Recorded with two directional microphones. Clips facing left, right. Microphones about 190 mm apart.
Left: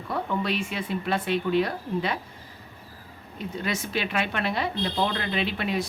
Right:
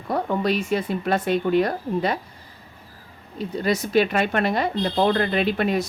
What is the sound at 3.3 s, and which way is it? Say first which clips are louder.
A woman's voice: right 7 dB; 40° right (ahead or behind).